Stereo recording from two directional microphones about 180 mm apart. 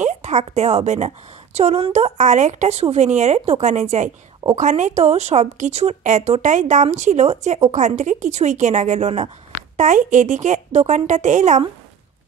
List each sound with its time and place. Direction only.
0.0 s a woman's voice: 40° right (ahead or behind)